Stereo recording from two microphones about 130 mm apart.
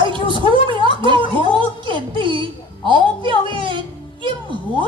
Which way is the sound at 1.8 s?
40° right (ahead or behind).